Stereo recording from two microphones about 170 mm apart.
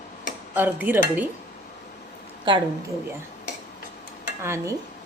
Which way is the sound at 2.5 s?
30° right (ahead or behind).